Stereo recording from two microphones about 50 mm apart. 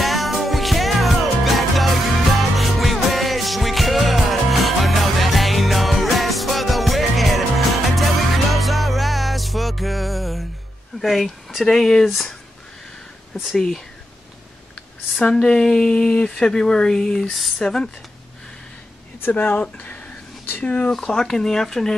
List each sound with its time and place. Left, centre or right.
0.0 s music: centre
11.0 s speech: centre
13.6 s speech: centre
15.2 s speech: centre
19.3 s speech: left
20.9 s speech: centre